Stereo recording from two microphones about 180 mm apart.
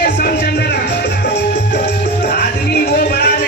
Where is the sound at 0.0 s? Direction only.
60° left (ahead or behind).